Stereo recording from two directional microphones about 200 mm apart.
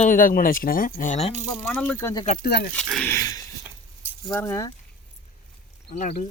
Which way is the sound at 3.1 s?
15° left (ahead or behind).